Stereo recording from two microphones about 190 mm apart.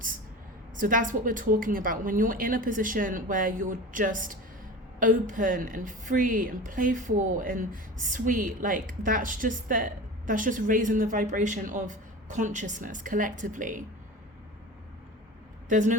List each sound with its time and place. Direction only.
0.8 s a woman's voice: 45° right (ahead or behind)
15.7 s a woman's voice: 40° right (ahead or behind)